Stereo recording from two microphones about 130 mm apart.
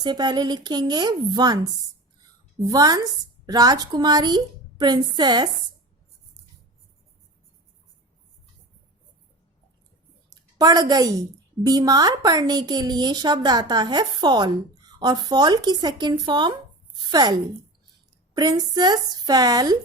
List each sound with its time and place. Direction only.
0.0 s a woman's voice: 35° right (ahead or behind)
2.6 s a woman's voice: 30° right (ahead or behind)
10.2 s a sound: 30° right (ahead or behind)
11.6 s a woman's voice: 30° right (ahead or behind)